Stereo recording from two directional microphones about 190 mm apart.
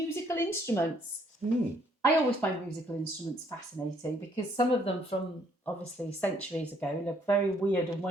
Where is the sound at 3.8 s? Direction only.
15° left (ahead or behind).